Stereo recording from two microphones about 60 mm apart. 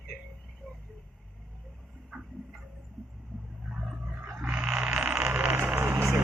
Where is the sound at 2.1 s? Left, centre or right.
Centre.